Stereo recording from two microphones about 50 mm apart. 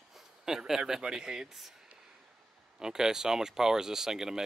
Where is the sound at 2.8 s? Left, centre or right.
Centre.